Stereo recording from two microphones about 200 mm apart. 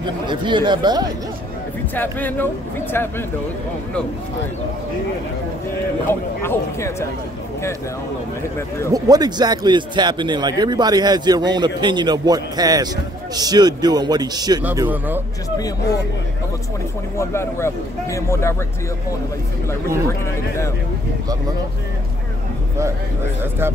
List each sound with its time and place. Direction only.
0.3 s a man's voice: 25° right (ahead or behind)
2.0 s speech: 10° left (ahead or behind)
6.4 s speech: 15° left (ahead or behind)
8.9 s a man's voice: 20° right (ahead or behind)
14.6 s speech: 10° right (ahead or behind)
17.2 s speech: 15° left (ahead or behind)
20.1 s speech: 15° left (ahead or behind)